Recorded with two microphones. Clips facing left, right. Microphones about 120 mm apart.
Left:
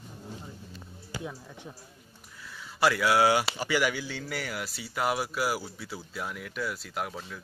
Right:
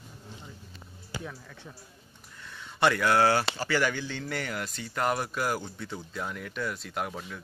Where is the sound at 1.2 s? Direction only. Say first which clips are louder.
Left 2 dB; 15° left (ahead or behind).